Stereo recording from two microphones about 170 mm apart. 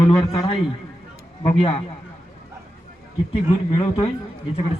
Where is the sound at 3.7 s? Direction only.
35° left (ahead or behind).